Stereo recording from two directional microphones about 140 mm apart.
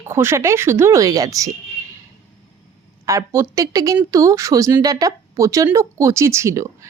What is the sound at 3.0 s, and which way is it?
A woman's voice, 20° right (ahead or behind).